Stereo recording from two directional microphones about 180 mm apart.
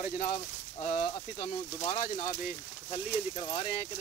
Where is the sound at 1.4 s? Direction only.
45° left (ahead or behind).